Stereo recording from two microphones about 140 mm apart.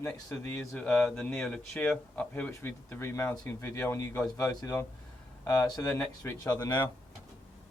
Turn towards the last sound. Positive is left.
turn(degrees=30)  # may be behind; listen again after turning